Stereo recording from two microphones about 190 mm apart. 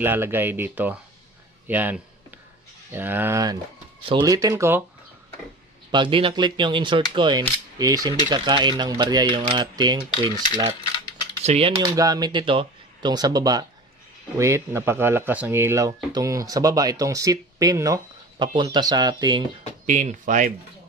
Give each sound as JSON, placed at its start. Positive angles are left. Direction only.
{"t": 0.0, "sound": "speech", "side_deg": -10}
{"t": 5.9, "sound": "speech", "side_deg": -25}
{"t": 11.4, "sound": "speech", "side_deg": -35}
{"t": 11.8, "sound": "speech", "side_deg": -20}
{"t": 19.9, "sound": "speech", "side_deg": -40}